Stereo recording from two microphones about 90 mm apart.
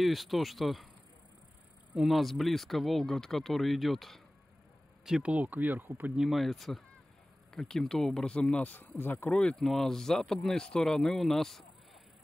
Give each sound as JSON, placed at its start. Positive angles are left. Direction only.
{"t": 0.0, "sound": "speech", "side_deg": 0}
{"t": 2.0, "sound": "speech", "side_deg": 0}
{"t": 6.1, "sound": "speech", "side_deg": -5}
{"t": 9.3, "sound": "speech", "side_deg": 10}